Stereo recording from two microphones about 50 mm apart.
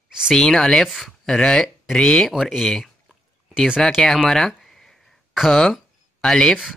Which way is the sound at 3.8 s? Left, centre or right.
Centre.